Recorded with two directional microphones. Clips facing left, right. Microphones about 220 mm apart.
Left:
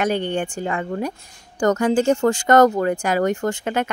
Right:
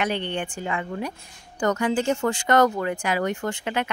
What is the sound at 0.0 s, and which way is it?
Speech, 45° left (ahead or behind).